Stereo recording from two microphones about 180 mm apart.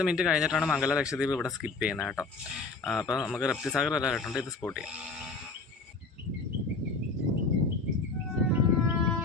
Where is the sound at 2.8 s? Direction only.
15° left (ahead or behind).